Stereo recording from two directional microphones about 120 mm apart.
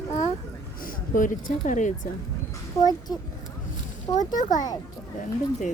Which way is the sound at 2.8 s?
35° left (ahead or behind).